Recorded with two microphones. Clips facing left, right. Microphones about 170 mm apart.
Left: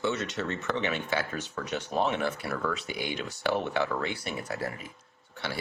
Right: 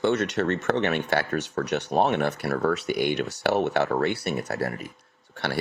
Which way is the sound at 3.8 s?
50° right (ahead or behind).